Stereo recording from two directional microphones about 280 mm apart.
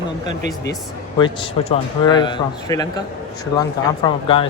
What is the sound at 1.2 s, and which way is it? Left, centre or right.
Speech, centre.